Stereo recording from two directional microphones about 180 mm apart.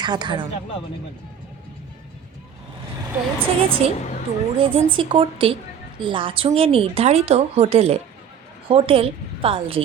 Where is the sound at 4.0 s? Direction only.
40° left (ahead or behind).